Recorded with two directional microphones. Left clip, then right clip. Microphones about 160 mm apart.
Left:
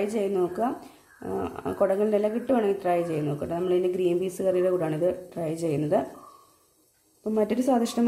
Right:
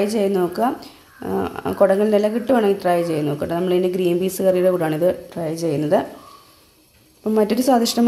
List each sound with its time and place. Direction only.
0.0 s speech: centre (ahead or behind)
5.4 s speech: 10° left (ahead or behind)
7.2 s speech: centre (ahead or behind)